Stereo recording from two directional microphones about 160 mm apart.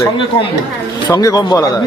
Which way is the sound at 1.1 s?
20° left (ahead or behind).